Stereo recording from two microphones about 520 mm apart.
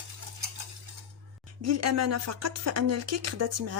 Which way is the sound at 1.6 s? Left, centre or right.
Right.